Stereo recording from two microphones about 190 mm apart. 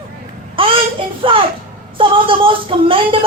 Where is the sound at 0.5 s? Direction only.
30° right (ahead or behind).